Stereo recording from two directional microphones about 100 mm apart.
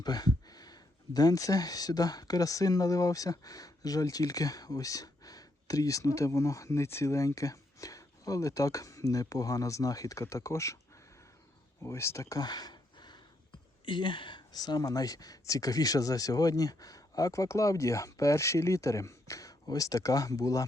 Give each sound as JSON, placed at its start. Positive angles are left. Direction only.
{"t": 0.0, "sound": "speech", "side_deg": 40}
{"t": 11.8, "sound": "speech", "side_deg": 30}